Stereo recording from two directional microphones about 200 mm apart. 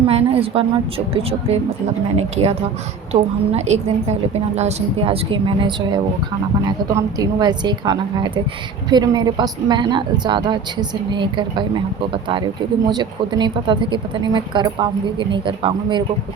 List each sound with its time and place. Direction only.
0.1 s a woman's voice: 30° right (ahead or behind)
12.9 s a woman's voice: 20° right (ahead or behind)